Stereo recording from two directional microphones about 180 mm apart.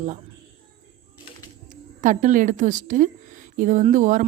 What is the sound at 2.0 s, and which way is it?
Speech, 45° right (ahead or behind).